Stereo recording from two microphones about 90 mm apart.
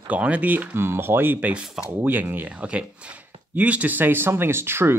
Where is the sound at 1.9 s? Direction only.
25° right (ahead or behind).